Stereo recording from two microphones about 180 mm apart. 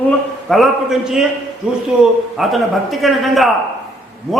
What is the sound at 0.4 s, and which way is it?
Speech, centre (ahead or behind).